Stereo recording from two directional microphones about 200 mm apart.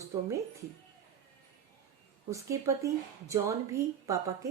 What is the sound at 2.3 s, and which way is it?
A woman's voice, 15° right (ahead or behind).